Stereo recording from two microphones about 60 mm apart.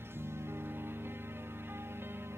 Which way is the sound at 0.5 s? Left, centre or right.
Right.